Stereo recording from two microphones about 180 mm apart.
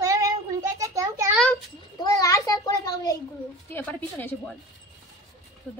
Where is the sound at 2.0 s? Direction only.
20° left (ahead or behind).